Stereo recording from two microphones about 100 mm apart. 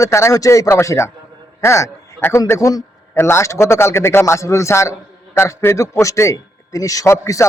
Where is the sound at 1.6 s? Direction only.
30° left (ahead or behind).